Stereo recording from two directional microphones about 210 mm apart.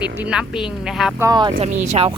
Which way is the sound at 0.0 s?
5° right (ahead or behind).